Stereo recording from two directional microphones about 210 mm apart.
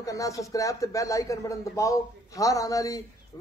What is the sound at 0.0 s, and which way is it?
A man's voice, 15° left (ahead or behind).